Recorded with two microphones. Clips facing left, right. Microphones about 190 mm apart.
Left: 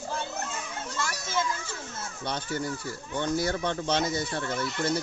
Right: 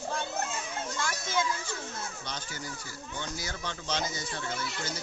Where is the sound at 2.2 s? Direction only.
55° left (ahead or behind).